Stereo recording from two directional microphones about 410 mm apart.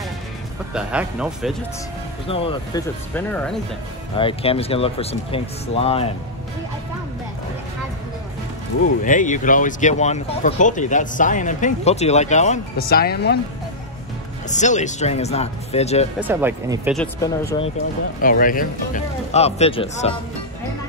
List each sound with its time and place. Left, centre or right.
0.7 s speech: centre
2.2 s speech: centre
4.2 s speech: centre
8.8 s speech: centre
14.5 s speech: centre
16.2 s speech: centre
18.2 s speech: centre